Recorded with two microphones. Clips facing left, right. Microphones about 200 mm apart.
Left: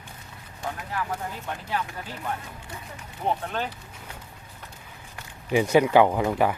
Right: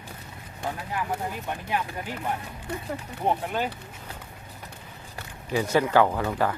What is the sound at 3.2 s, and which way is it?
Speech, 15° right (ahead or behind).